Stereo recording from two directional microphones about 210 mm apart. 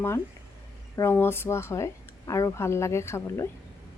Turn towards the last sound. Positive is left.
turn(degrees=15)  # may be behind; listen again after turning